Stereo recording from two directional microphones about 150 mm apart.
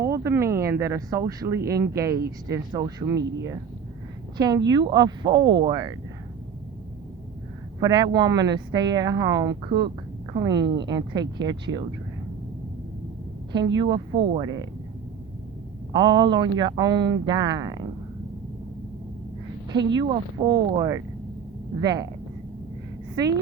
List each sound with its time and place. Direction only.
0.0 s speech: 20° right (ahead or behind)
7.8 s speech: 25° right (ahead or behind)
13.5 s speech: 30° right (ahead or behind)
15.9 s speech: 30° right (ahead or behind)
19.7 s speech: 30° right (ahead or behind)
23.2 s speech: 25° right (ahead or behind)